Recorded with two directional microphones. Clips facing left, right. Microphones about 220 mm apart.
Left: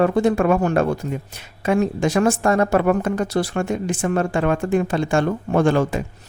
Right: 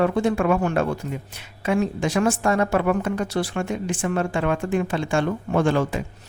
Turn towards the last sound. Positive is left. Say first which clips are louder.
# left 3 dB
turn(degrees=45)  # may be behind; listen again after turning